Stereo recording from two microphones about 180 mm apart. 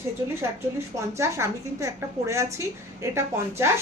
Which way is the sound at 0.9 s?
15° right (ahead or behind).